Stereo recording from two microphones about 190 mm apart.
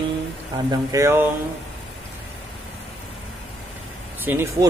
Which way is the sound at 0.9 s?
15° right (ahead or behind).